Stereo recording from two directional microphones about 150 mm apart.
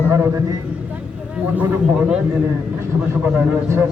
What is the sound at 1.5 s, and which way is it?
Speech, 10° right (ahead or behind).